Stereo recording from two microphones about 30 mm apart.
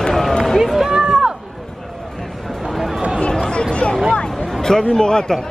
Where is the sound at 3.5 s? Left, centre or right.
Left.